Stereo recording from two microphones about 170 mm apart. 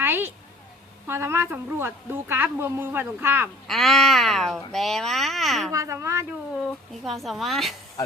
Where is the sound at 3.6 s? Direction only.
Centre (ahead or behind).